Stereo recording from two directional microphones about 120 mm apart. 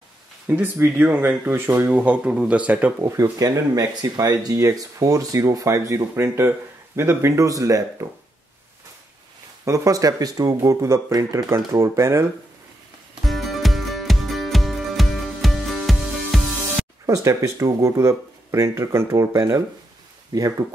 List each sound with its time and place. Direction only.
0.5 s speech: 15° right (ahead or behind)
3.0 s speech: 25° right (ahead or behind)
9.7 s speech: 30° right (ahead or behind)
13.2 s music: centre (ahead or behind)
17.0 s speech: 25° right (ahead or behind)